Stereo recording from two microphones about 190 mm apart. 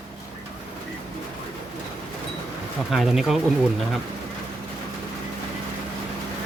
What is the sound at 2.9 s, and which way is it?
Speech, centre (ahead or behind).